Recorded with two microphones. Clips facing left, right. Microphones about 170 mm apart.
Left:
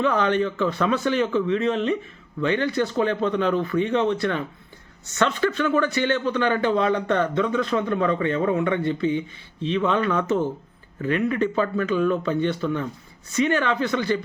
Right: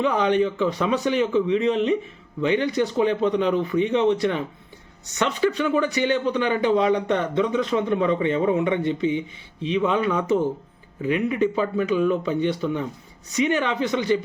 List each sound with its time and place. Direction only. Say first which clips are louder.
0.0 s speech: right 1 dB; 15° right (ahead or behind)